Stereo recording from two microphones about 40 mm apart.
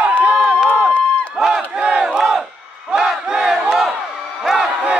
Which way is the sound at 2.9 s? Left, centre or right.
Centre.